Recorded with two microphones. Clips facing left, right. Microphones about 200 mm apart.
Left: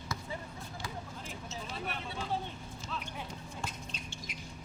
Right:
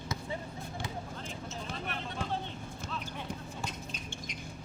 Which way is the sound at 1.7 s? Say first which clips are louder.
Even; 5° left (ahead or behind).